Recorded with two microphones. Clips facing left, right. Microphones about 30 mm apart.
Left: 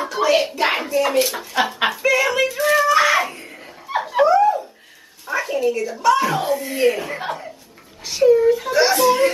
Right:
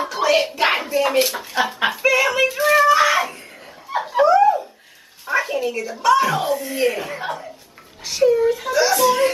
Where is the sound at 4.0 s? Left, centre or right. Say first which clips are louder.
Even; centre.